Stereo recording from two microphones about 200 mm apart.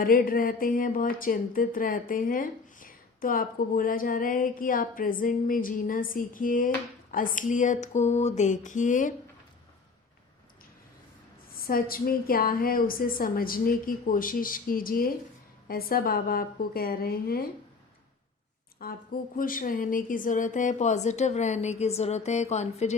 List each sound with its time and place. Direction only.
0.0 s a woman's voice: 45° left (ahead or behind)
11.5 s speech: 45° left (ahead or behind)
18.8 s a woman's voice: 45° left (ahead or behind)